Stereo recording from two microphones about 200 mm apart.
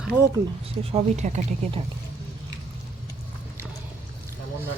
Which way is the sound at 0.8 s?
30° right (ahead or behind).